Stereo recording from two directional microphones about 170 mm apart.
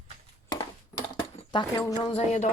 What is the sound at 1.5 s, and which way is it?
Speech, 25° left (ahead or behind).